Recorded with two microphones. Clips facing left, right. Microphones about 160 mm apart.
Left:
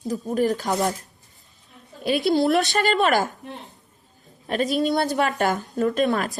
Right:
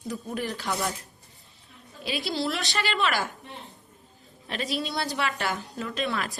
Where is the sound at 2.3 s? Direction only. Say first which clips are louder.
Left 11 dB; 50° left (ahead or behind).